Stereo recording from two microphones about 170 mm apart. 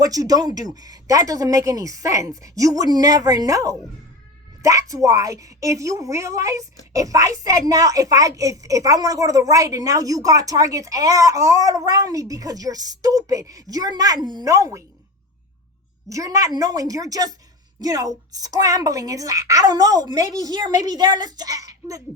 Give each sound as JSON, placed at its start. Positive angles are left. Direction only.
{"t": 0.0, "sound": "a woman's voice", "side_deg": -20}
{"t": 16.0, "sound": "a woman's voice", "side_deg": -20}